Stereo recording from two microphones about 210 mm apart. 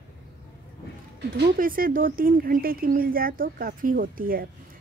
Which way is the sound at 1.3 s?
45° right (ahead or behind).